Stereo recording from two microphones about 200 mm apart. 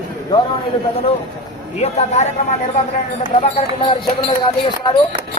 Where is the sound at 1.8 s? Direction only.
35° left (ahead or behind).